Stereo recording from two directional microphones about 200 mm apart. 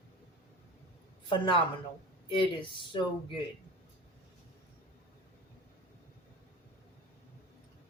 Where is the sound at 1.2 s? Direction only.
25° left (ahead or behind).